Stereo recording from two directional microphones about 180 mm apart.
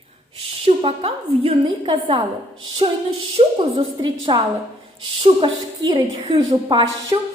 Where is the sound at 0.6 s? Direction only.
30° right (ahead or behind).